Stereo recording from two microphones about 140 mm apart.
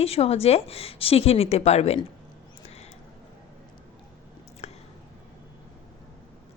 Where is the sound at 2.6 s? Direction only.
50° left (ahead or behind).